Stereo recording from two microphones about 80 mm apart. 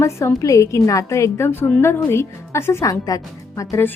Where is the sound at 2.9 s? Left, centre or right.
Left.